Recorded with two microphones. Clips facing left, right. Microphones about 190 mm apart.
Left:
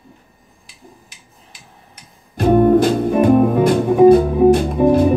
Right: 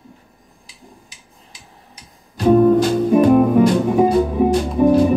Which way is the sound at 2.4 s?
55° left (ahead or behind).